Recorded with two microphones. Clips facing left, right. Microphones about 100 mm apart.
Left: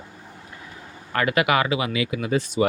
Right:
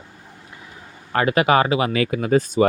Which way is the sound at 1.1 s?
30° right (ahead or behind).